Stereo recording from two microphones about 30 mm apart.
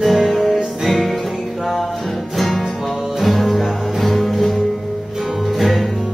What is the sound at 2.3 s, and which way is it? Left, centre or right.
Music, centre.